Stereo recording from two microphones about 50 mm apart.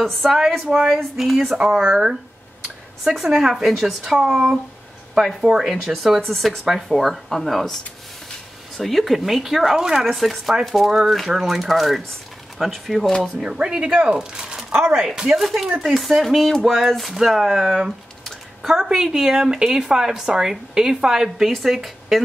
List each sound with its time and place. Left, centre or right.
0.0 s speech: centre
3.3 s speech: centre
6.3 s speech: centre
10.0 s speech: centre
10.9 s speech: centre
13.4 s speech: centre
14.7 s speech: right
15.0 s speech: centre
18.2 s a sound: centre
18.9 s speech: centre